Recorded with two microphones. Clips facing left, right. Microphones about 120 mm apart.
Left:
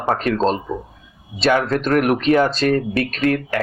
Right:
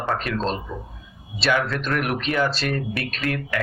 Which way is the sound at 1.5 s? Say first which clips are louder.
Left 6 dB; 40° left (ahead or behind).